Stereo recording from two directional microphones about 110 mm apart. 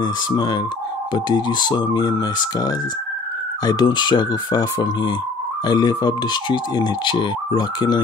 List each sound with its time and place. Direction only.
0.0 s speech: 40° left (ahead or behind)